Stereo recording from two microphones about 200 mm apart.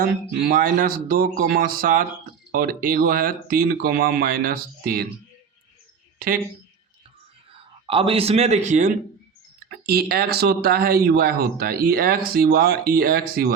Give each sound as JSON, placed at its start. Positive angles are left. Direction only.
{"t": 0.0, "sound": "speech", "side_deg": -45}
{"t": 6.1, "sound": "speech", "side_deg": -45}
{"t": 7.9, "sound": "a man's voice", "side_deg": -25}
{"t": 9.6, "sound": "speech", "side_deg": -50}